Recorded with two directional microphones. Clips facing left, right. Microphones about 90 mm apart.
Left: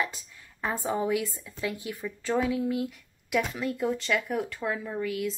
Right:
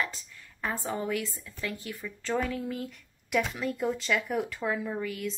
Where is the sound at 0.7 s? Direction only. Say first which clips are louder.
Left 5 dB; 15° left (ahead or behind).